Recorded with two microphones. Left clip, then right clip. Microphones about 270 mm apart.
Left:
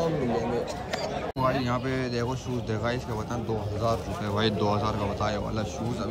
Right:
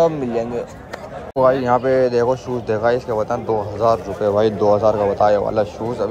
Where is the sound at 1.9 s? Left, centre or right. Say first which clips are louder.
Right 15 dB; centre.